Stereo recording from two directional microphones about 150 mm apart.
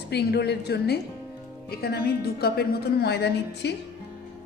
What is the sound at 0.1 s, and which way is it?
A woman's voice, 90° left.